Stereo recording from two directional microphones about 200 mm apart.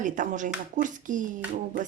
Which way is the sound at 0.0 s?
40° right (ahead or behind).